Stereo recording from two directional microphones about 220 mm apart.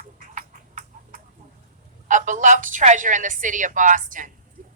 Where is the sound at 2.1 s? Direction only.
35° right (ahead or behind).